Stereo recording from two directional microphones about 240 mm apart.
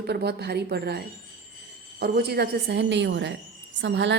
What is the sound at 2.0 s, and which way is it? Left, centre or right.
Speech, right.